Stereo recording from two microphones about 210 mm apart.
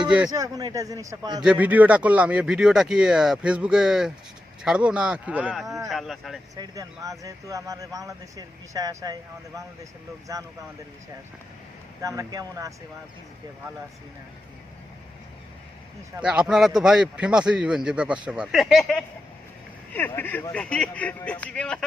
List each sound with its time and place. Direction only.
0.3 s speech: 15° right (ahead or behind)
1.5 s a man's voice: 5° right (ahead or behind)
5.9 s a man's voice: centre (ahead or behind)
6.6 s speech: 15° right (ahead or behind)
10.3 s speech: 15° right (ahead or behind)
12.0 s speech: 15° right (ahead or behind)
16.1 s a man's voice: 5° right (ahead or behind)